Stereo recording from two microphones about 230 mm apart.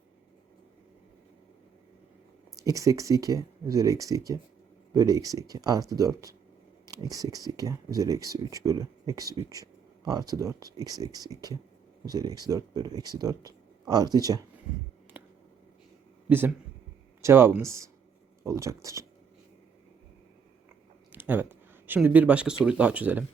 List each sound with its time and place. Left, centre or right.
2.6 s speech: centre
15.1 s a sound: centre
17.2 s speech: centre
21.1 s speech: centre